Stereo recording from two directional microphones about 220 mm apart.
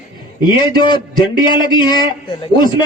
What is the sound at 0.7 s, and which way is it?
A man's voice, 20° left (ahead or behind).